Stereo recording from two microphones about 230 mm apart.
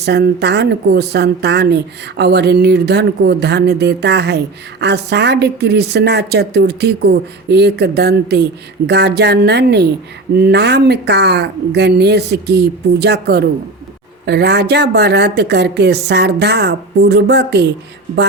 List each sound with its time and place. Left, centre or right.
0.0 s a woman's voice: right